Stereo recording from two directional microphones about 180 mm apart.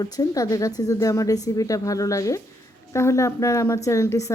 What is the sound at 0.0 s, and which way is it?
A woman's voice, 20° left (ahead or behind).